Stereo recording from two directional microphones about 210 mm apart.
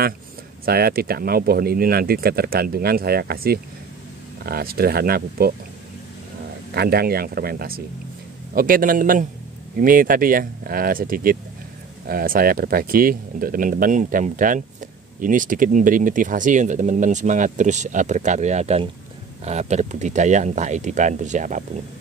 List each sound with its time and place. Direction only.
0.7 s speech: 45° right (ahead or behind)
6.7 s speech: 50° right (ahead or behind)